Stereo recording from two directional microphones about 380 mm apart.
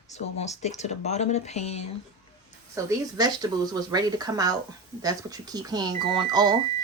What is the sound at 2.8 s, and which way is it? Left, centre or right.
Speech, centre.